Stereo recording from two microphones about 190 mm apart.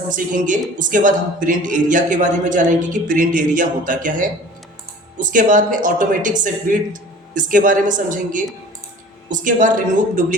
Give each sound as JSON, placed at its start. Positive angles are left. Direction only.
{"t": 0.1, "sound": "speech", "side_deg": -45}